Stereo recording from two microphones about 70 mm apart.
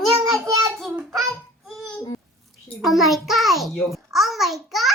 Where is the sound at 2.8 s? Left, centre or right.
Centre.